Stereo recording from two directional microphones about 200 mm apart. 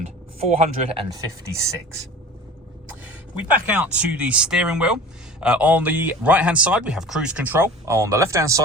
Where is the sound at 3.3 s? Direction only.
5° right (ahead or behind).